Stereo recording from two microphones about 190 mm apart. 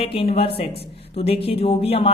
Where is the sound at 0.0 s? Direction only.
30° left (ahead or behind).